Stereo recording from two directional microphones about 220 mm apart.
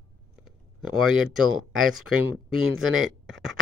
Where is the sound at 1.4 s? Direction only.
75° right (ahead or behind).